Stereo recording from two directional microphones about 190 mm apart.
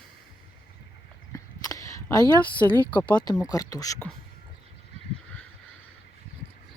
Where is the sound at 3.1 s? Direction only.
20° left (ahead or behind).